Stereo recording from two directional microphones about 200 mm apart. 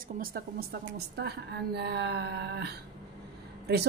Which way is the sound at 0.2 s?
50° right (ahead or behind).